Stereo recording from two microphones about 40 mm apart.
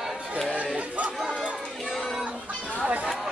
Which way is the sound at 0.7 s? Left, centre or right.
Right.